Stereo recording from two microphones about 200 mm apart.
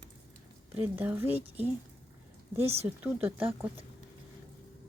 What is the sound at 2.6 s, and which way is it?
Speech, 30° right (ahead or behind).